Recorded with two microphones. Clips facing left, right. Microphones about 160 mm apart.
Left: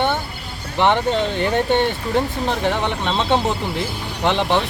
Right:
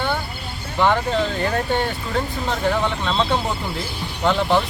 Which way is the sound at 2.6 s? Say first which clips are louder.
Right 3 dB; 20° left (ahead or behind).